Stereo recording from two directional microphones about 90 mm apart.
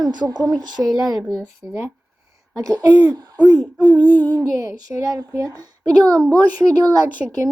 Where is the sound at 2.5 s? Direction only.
40° right (ahead or behind).